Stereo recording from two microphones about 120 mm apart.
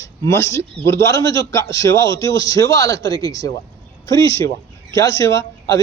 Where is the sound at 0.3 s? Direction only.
25° left (ahead or behind).